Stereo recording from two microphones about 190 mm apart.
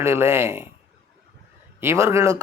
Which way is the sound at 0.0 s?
15° right (ahead or behind).